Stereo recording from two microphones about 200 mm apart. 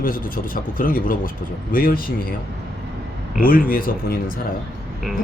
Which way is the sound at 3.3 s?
45° left (ahead or behind).